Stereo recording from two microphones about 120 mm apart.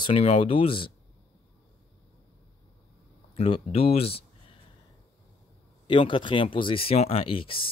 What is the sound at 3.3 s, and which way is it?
Speech, 55° left (ahead or behind).